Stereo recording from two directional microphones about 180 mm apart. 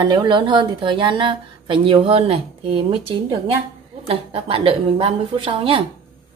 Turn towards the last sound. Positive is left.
turn(degrees=-30)  # may be behind; listen again after turning